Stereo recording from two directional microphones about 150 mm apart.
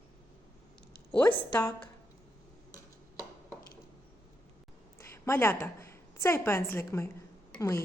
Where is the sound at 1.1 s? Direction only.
10° left (ahead or behind).